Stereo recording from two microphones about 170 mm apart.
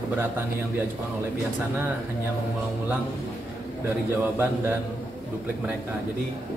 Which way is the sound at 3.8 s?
10° right (ahead or behind).